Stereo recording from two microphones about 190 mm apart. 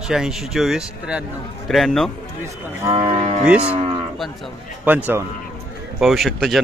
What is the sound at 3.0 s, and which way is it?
Speech, 35° right (ahead or behind).